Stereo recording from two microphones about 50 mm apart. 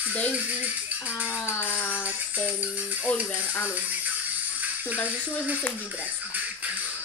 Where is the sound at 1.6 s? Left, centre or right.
Left.